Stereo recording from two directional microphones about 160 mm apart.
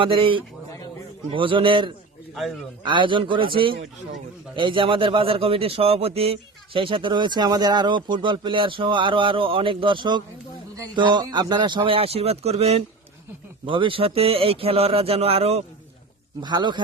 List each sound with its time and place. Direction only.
0.0 s a man's voice: 35° right (ahead or behind)
2.3 s a man's voice: centre (ahead or behind)
2.8 s a man's voice: 30° right (ahead or behind)
16.4 s speech: 25° right (ahead or behind)